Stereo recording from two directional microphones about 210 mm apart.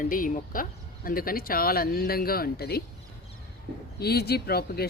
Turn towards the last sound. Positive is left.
turn(degrees=50)  # may be behind; listen again after turning